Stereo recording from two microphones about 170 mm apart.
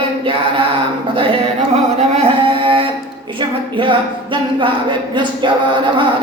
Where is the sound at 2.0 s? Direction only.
35° right (ahead or behind).